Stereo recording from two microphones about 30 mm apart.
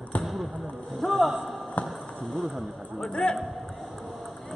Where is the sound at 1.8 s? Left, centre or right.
Left.